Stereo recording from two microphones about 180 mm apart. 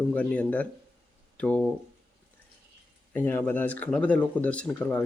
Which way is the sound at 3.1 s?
10° left (ahead or behind).